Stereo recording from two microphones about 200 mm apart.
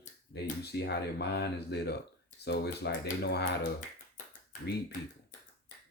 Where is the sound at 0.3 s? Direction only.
55° left (ahead or behind).